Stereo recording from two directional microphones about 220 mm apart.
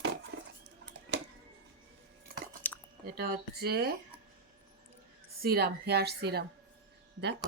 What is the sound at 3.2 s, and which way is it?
Speech, 45° right (ahead or behind).